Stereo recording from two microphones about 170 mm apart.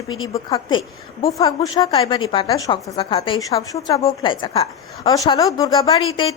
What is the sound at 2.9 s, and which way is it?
A woman's voice, 30° left (ahead or behind).